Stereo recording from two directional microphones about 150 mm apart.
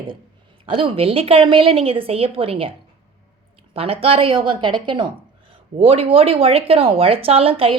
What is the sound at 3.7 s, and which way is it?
A woman's voice, 40° right (ahead or behind).